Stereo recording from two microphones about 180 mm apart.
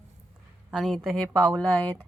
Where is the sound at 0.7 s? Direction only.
Centre (ahead or behind).